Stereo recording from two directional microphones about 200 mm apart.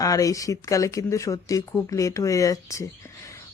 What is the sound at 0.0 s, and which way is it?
Speech, 15° left (ahead or behind).